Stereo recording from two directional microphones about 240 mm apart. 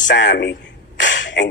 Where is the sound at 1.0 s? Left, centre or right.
Left.